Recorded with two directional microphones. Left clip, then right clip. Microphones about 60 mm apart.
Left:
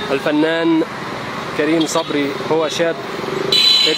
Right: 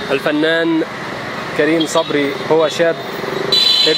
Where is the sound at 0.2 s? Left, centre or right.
Centre.